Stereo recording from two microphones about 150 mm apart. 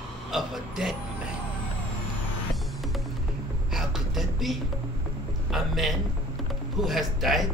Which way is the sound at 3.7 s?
5° right (ahead or behind).